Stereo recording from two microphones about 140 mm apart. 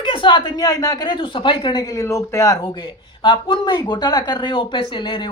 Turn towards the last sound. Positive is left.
turn(degrees=35)  # may be behind; listen again after turning